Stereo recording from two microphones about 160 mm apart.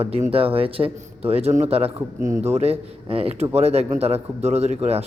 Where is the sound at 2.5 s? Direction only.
40° right (ahead or behind).